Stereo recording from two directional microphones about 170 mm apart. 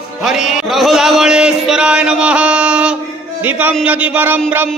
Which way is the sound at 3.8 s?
10° right (ahead or behind).